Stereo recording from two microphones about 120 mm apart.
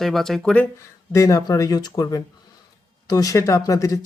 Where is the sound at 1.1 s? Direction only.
25° left (ahead or behind).